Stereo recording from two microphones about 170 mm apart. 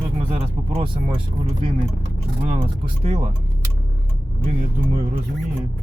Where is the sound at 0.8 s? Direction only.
35° right (ahead or behind).